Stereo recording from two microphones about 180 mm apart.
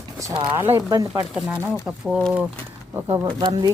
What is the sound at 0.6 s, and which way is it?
Speech, 15° right (ahead or behind).